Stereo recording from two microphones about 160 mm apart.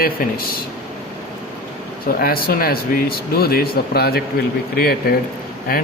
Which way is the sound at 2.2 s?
70° left (ahead or behind).